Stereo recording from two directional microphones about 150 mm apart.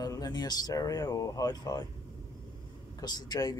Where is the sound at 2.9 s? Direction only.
25° left (ahead or behind).